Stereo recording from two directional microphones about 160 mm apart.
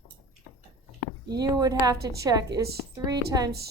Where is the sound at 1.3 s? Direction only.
25° right (ahead or behind).